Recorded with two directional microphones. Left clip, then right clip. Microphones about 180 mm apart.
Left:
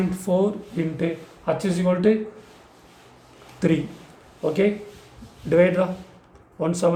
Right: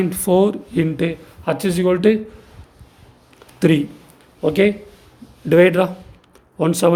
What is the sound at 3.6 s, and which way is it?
Speech, 50° right (ahead or behind).